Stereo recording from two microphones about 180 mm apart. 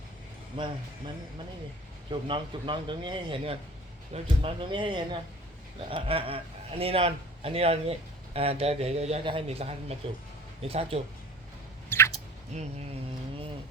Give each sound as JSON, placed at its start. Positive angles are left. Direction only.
{"t": 0.5, "sound": "a man's voice", "side_deg": -25}
{"t": 11.9, "sound": "chewing", "side_deg": 15}
{"t": 12.5, "sound": "a man's voice", "side_deg": -40}